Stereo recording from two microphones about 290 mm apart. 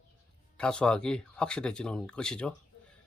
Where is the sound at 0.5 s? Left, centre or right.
Centre.